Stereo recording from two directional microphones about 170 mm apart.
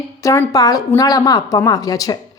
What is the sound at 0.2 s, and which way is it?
A woman's voice, 20° left (ahead or behind).